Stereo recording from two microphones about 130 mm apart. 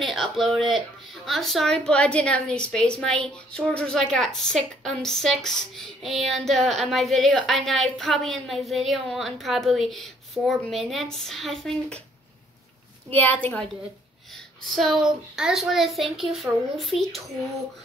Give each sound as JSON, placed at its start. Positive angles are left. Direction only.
{"t": 0.0, "sound": "speech", "side_deg": 0}
{"t": 13.1, "sound": "a woman's voice", "side_deg": 15}
{"t": 14.8, "sound": "speech", "side_deg": 0}